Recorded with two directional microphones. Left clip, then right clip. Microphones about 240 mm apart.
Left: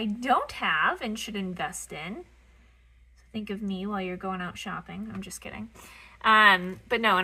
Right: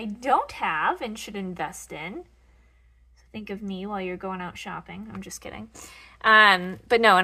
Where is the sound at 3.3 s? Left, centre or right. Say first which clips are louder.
Even; right.